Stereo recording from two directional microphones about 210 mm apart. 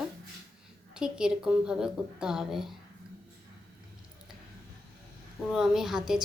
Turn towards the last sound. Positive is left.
turn(degrees=0)  # may be behind; listen again after turning